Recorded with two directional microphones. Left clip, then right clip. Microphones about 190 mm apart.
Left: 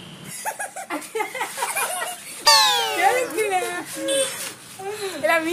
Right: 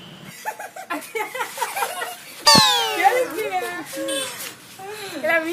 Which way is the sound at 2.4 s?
Centre (ahead or behind).